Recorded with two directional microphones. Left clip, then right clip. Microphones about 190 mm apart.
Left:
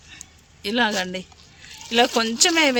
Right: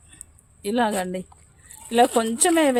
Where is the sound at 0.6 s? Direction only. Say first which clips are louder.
Left 1 dB; 35° right (ahead or behind).